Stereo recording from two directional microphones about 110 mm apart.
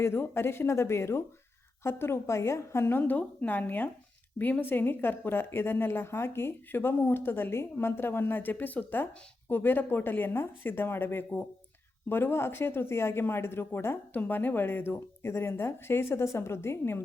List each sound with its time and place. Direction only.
0.0 s speech: 20° left (ahead or behind)